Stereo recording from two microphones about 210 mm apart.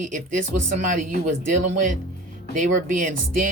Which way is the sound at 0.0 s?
35° right (ahead or behind).